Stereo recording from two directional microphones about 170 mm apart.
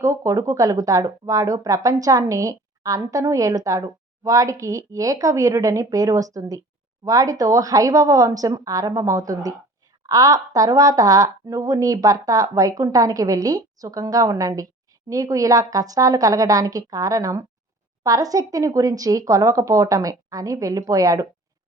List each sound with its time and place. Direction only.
0.0 s speech: 20° right (ahead or behind)